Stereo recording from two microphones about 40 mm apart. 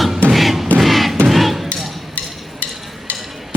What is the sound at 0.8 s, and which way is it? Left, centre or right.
Music, centre.